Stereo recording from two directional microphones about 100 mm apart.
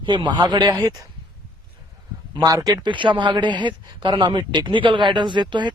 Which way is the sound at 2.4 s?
40° right (ahead or behind).